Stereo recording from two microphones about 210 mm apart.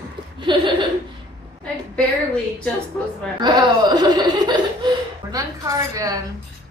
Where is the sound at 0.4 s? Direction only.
20° right (ahead or behind).